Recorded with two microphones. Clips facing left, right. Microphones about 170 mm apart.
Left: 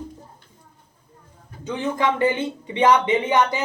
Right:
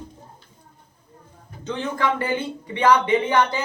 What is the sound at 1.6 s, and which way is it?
Speech, 15° left (ahead or behind).